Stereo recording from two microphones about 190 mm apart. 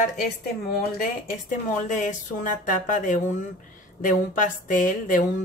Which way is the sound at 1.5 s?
40° left (ahead or behind).